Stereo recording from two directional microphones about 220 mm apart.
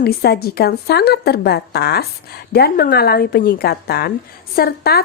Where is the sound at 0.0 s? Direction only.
45° left (ahead or behind).